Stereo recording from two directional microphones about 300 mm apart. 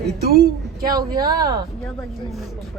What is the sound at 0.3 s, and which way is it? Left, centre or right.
Speech, right.